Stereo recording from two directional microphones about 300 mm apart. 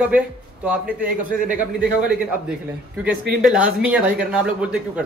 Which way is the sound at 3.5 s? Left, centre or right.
Centre.